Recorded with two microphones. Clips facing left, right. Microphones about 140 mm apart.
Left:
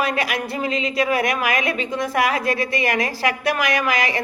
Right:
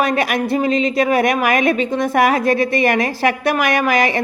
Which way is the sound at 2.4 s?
25° right (ahead or behind).